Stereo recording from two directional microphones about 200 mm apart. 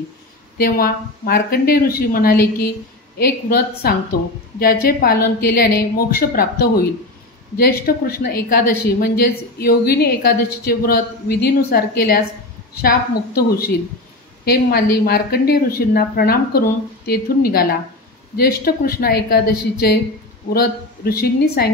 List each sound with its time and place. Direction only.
0.6 s a woman's voice: 50° left (ahead or behind)
14.4 s a woman's voice: 50° left (ahead or behind)